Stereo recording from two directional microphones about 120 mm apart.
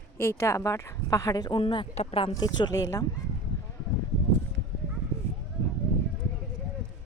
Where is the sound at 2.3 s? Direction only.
35° left (ahead or behind).